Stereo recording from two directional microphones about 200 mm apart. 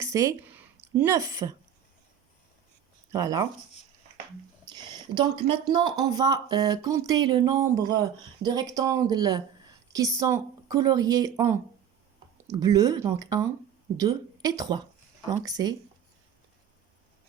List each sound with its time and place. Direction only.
0.0 s a sound: 15° right (ahead or behind)
0.9 s speech: 15° right (ahead or behind)
3.1 s speech: 15° right (ahead or behind)
4.6 s speech: 20° right (ahead or behind)